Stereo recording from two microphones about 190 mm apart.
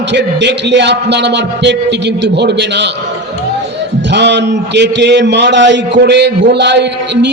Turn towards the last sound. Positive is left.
turn(degrees=-65)  # may be behind; listen again after turning